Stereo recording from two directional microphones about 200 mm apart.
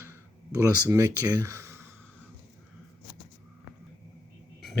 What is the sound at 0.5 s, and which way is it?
Speech, 15° right (ahead or behind).